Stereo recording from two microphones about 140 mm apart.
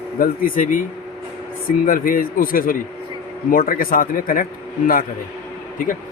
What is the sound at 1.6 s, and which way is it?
Speech, 90° left.